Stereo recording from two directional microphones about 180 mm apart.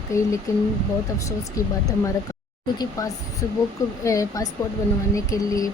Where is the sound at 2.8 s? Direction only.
20° left (ahead or behind).